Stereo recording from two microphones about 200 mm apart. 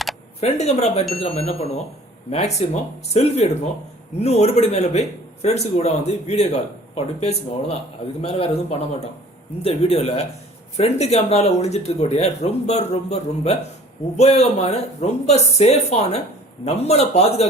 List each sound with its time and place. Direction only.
0.3 s a man's voice: 30° left (ahead or behind)